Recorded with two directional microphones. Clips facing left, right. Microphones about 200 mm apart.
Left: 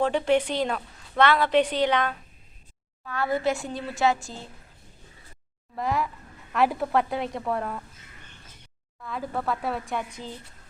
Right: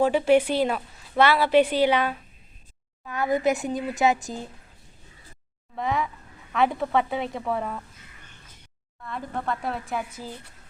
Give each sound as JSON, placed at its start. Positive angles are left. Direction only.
{"t": 0.0, "sound": "a woman's voice", "side_deg": -5}
{"t": 5.7, "sound": "a woman's voice", "side_deg": 0}
{"t": 9.0, "sound": "a woman's voice", "side_deg": 0}